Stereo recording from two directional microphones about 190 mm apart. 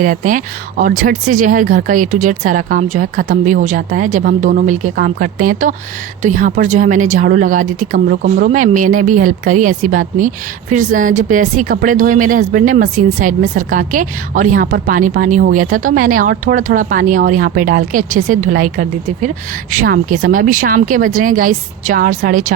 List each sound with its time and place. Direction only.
0.0 s speech: 45° right (ahead or behind)